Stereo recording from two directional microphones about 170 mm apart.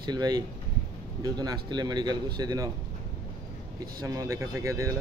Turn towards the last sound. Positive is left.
turn(degrees=-20)  # may be behind; listen again after turning